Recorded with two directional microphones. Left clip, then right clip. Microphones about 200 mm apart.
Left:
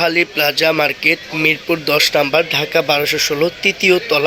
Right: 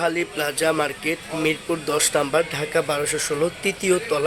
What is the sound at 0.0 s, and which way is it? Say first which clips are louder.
A man's voice: left 8 dB; 15° left (ahead or behind).